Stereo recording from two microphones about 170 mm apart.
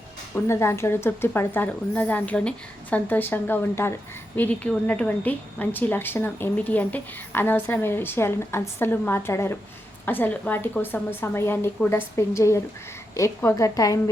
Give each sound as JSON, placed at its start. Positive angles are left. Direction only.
{"t": 0.3, "sound": "a woman's voice", "side_deg": 15}